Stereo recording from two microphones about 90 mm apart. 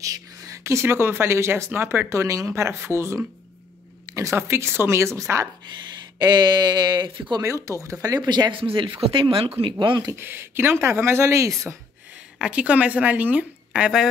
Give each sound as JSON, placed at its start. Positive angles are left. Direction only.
{"t": 0.0, "sound": "speech", "side_deg": -40}
{"t": 6.1, "sound": "speech", "side_deg": -55}
{"t": 7.3, "sound": "speech", "side_deg": -35}
{"t": 8.3, "sound": "speech", "side_deg": -60}
{"t": 10.1, "sound": "speech", "side_deg": -25}
{"t": 12.4, "sound": "a woman's voice", "side_deg": -15}